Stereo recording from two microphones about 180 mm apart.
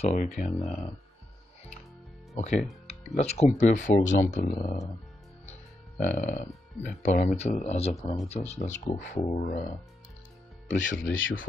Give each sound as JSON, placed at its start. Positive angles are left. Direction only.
{"t": 0.0, "sound": "speech", "side_deg": 40}
{"t": 2.3, "sound": "music", "side_deg": 40}
{"t": 3.2, "sound": "speech", "side_deg": 35}